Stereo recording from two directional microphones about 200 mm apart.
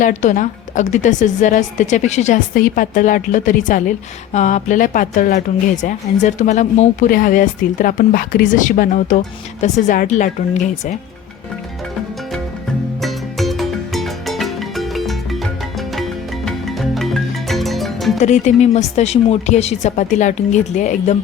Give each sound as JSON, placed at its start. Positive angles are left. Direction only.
{"t": 0.0, "sound": "a woman's voice", "side_deg": 40}
{"t": 13.0, "sound": "music", "side_deg": 0}
{"t": 16.5, "sound": "music", "side_deg": 0}
{"t": 18.2, "sound": "a woman's voice", "side_deg": 35}